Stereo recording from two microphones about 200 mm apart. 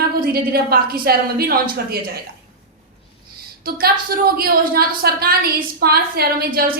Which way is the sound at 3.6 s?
50° right (ahead or behind).